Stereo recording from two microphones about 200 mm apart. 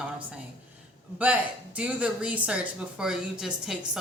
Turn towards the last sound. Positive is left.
turn(degrees=0)  # may be behind; listen again after turning